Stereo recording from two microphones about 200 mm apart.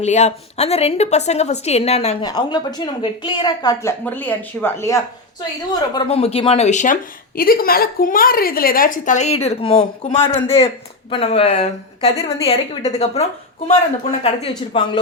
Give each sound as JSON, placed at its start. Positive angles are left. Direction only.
{"t": 0.0, "sound": "a woman's voice", "side_deg": 35}
{"t": 2.2, "sound": "a woman's voice", "side_deg": 20}
{"t": 4.0, "sound": "speech", "side_deg": 10}
{"t": 5.9, "sound": "a woman's voice", "side_deg": 25}